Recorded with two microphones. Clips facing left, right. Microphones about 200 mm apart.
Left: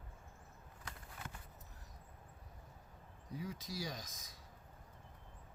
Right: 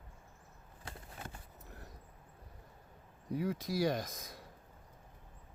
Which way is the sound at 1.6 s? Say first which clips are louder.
Right 8 dB; 65° right (ahead or behind).